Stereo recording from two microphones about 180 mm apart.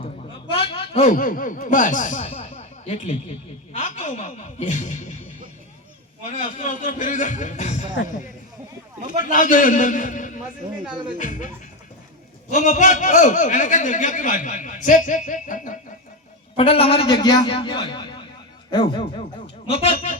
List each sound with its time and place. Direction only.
0.5 s a sound: 30° left (ahead or behind)
1.1 s a man's voice: 50° left (ahead or behind)
2.2 s a sound: 30° left (ahead or behind)
3.7 s speech: 40° left (ahead or behind)
6.2 s a man's voice: 40° left (ahead or behind)
9.3 s a man's voice: 45° left (ahead or behind)
12.5 s a man's voice: 45° left (ahead or behind)
16.6 s a man's voice: 30° left (ahead or behind)